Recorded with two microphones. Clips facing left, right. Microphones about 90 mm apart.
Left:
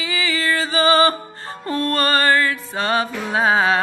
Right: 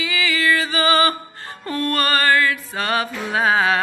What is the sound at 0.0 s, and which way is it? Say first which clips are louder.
Music: right 1 dB; 30° left (ahead or behind).